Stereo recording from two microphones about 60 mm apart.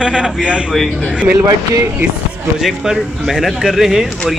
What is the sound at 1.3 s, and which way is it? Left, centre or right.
Speech, right.